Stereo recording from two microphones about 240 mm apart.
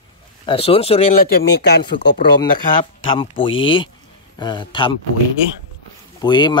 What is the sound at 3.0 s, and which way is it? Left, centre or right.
Speech, left.